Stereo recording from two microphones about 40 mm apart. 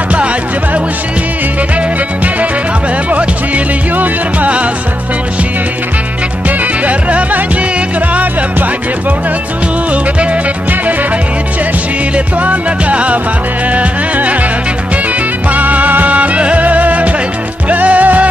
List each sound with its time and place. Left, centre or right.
3.1 s music: right
3.9 s music: right
6.9 s music: right
12.4 s music: right
15.5 s music: right